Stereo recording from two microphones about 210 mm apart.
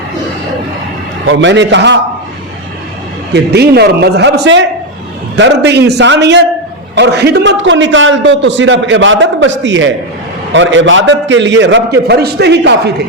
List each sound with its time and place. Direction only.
1.3 s a man's voice: 60° right (ahead or behind)
3.3 s a man's voice: 50° right (ahead or behind)